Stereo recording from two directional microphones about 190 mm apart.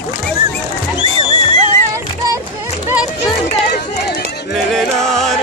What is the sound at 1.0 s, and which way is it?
Music, 30° right (ahead or behind).